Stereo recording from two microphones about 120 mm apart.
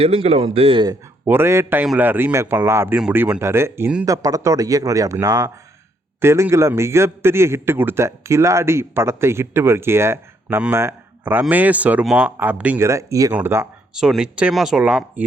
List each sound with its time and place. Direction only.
0.0 s speech: 55° right (ahead or behind)
1.2 s a man's voice: 20° right (ahead or behind)
12.9 s a man's voice: 25° right (ahead or behind)
13.9 s speech: 5° right (ahead or behind)